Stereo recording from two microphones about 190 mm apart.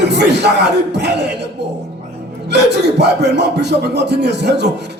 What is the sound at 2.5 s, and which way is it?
Speech, 60° right (ahead or behind).